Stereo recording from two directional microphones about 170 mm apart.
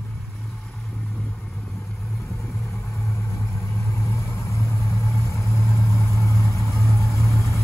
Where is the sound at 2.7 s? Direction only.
15° left (ahead or behind).